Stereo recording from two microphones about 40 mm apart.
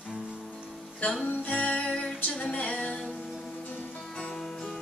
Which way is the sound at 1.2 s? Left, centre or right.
Left.